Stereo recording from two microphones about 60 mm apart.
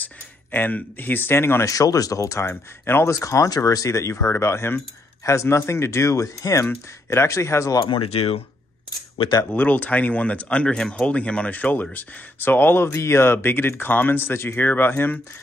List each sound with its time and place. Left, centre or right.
0.0 s speech: left
1.6 s speech: left
5.2 s speech: left
7.1 s speech: left
9.5 s speech: left
12.8 s speech: left